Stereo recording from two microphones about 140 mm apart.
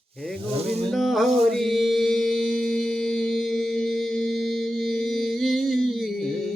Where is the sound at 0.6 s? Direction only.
45° right (ahead or behind).